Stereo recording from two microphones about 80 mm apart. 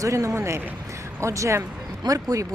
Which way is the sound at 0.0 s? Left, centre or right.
Right.